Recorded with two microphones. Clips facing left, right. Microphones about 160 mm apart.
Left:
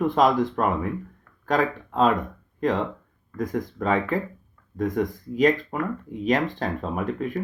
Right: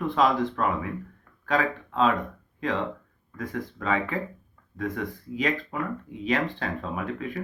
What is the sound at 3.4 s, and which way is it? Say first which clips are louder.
Speech: left 6 dB; 45° left (ahead or behind).